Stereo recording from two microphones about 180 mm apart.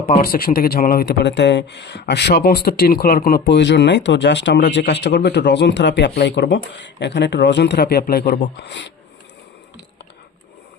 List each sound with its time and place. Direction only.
0.2 s speech: 55° left (ahead or behind); by 8.9 s 75° left (ahead or behind)